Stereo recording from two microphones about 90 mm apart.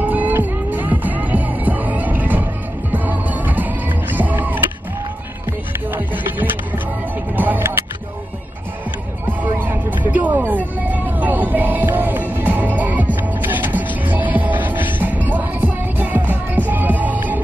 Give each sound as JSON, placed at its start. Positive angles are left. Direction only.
{"t": 0.0, "sound": "music", "side_deg": -20}
{"t": 5.9, "sound": "music", "side_deg": -20}
{"t": 9.2, "sound": "music", "side_deg": -20}